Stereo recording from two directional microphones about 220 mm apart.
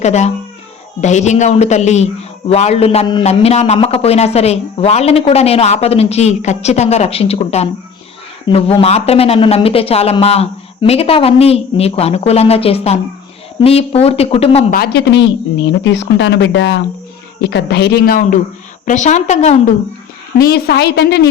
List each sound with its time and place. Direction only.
0.0 s a man's voice: 30° left (ahead or behind)
14.8 s speech: 50° left (ahead or behind); by 19.7 s 30° left (ahead or behind)
20.4 s speech: 45° left (ahead or behind)